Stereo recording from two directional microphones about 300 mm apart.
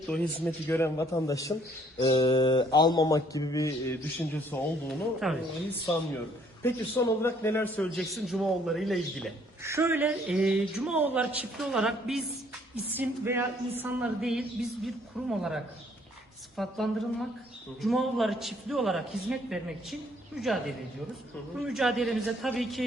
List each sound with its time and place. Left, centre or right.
0.1 s a man's voice: centre
4.5 s a man's voice: centre
6.6 s a man's voice: centre